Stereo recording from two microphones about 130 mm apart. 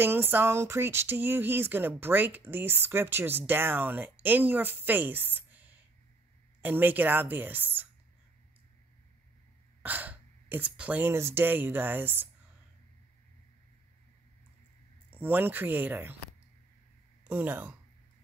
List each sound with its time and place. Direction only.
0.0 s speech: 15° right (ahead or behind)
9.8 s speech: 15° right (ahead or behind)
15.0 s speech: 15° right (ahead or behind)
17.3 s speech: 10° right (ahead or behind)